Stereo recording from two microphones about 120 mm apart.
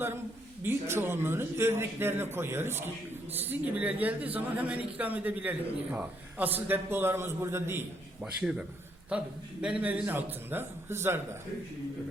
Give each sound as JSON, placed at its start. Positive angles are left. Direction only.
{"t": 0.6, "sound": "a man's voice", "side_deg": -20}
{"t": 8.2, "sound": "a man's voice", "side_deg": -5}